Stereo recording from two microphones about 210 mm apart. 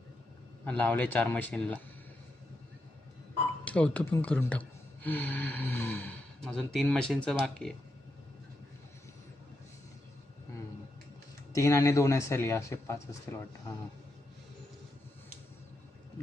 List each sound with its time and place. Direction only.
0.6 s speech: 5° left (ahead or behind)
3.6 s speech: 5° left (ahead or behind)
11.5 s speech: 15° left (ahead or behind)